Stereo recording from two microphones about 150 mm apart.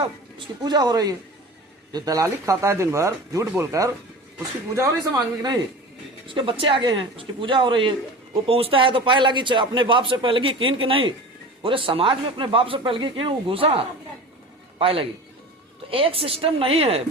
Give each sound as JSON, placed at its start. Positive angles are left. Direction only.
{"t": 0.0, "sound": "a woman's voice", "side_deg": -30}